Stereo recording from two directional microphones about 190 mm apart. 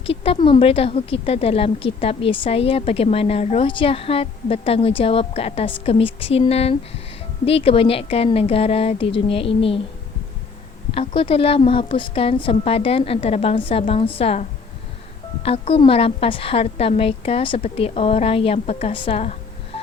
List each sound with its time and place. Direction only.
0.0 s a woman's voice: 30° left (ahead or behind)
10.9 s a woman's voice: 30° left (ahead or behind)
15.4 s speech: 30° left (ahead or behind)
19.7 s a sound: 30° left (ahead or behind)